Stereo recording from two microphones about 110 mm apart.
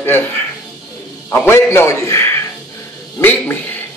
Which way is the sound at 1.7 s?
25° left (ahead or behind).